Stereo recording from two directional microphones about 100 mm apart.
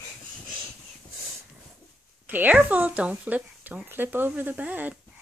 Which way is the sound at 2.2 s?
15° right (ahead or behind).